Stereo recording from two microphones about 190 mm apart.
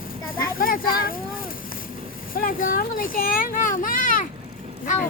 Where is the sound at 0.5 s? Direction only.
50° left (ahead or behind).